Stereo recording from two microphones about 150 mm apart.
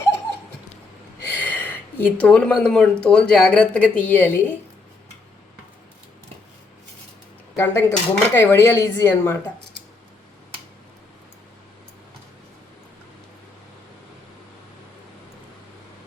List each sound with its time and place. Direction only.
1.4 s a sound: 10° left (ahead or behind)
3.0 s speech: 5° left (ahead or behind)
7.5 s speech: 15° left (ahead or behind)